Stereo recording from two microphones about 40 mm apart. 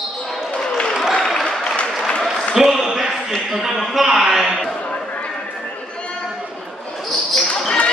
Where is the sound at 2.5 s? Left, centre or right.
Centre.